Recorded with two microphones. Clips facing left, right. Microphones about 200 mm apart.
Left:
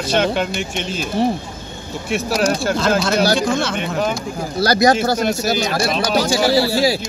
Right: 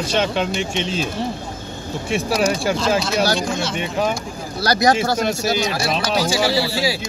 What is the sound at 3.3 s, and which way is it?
Speech, 55° left (ahead or behind).